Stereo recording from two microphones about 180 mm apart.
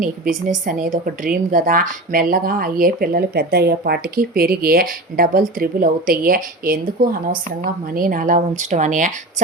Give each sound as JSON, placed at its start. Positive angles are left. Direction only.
{"t": 0.0, "sound": "speech", "side_deg": -45}